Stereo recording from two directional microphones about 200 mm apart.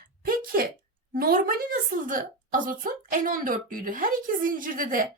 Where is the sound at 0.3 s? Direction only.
45° right (ahead or behind).